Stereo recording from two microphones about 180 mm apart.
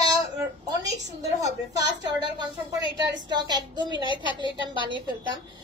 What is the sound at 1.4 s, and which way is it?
A woman's voice, 20° right (ahead or behind).